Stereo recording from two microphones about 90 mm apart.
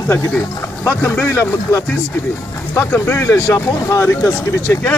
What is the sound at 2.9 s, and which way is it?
Speech, 25° left (ahead or behind).